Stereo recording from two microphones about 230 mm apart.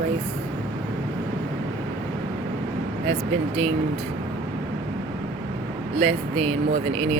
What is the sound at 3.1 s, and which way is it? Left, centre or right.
Speech, right.